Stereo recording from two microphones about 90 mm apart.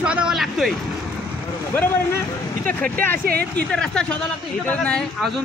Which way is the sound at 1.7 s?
20° left (ahead or behind).